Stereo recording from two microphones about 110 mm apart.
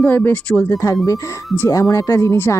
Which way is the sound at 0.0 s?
15° left (ahead or behind).